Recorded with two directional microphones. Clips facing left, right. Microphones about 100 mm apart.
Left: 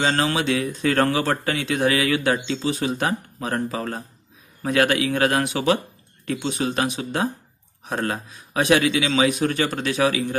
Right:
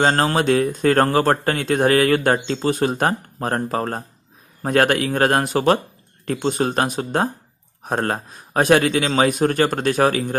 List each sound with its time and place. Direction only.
0.0 s speech: 45° right (ahead or behind)